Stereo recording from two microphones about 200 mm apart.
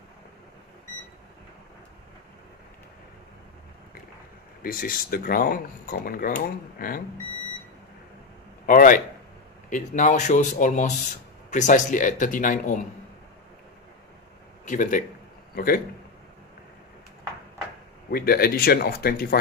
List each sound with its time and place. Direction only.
4.6 s speech: 45° left (ahead or behind)
8.6 s a man's voice: 40° left (ahead or behind)
14.6 s a man's voice: 40° left (ahead or behind)
18.1 s speech: 50° left (ahead or behind)